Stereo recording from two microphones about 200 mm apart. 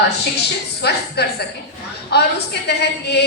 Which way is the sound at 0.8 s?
55° left (ahead or behind).